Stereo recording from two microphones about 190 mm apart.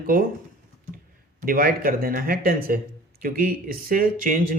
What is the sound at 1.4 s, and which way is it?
Speech, 50° right (ahead or behind).